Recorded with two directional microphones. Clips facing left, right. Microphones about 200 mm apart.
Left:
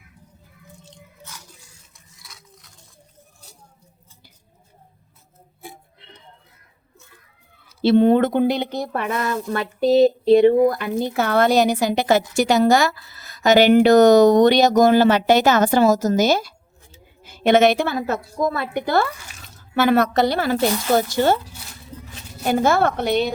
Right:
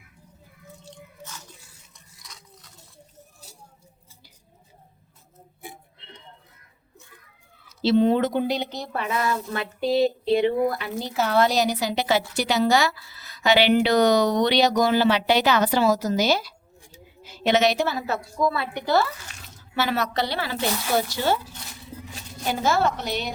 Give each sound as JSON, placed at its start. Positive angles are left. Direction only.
{"t": 1.3, "sound": "a sound", "side_deg": 10}
{"t": 7.8, "sound": "a woman's voice", "side_deg": 55}
{"t": 22.4, "sound": "a woman's voice", "side_deg": 55}